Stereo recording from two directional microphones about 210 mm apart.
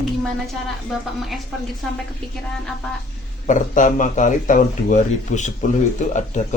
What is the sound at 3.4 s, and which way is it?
Speech, 35° left (ahead or behind).